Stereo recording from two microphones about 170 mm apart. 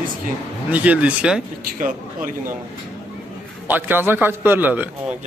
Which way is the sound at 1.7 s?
55° right (ahead or behind).